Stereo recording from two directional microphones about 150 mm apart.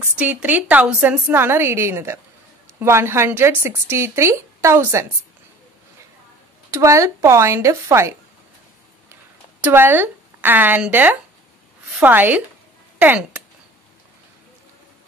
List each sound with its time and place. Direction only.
0.0 s speech: 10° right (ahead or behind)
6.7 s speech: 20° right (ahead or behind)
9.6 s speech: 15° right (ahead or behind)